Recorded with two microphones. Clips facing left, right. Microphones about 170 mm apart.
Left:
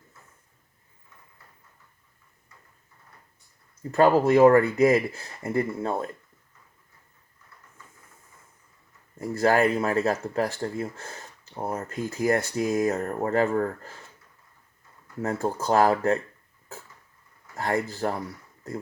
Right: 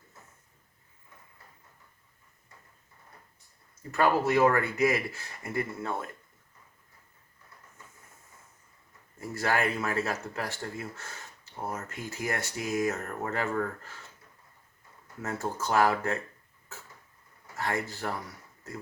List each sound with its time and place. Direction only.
4.3 s speech: 35° left (ahead or behind)
9.4 s speech: 35° left (ahead or behind)
15.2 s speech: 35° left (ahead or behind)
17.6 s speech: 35° left (ahead or behind)